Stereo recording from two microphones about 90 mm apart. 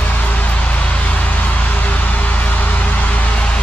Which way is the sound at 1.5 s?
15° left (ahead or behind).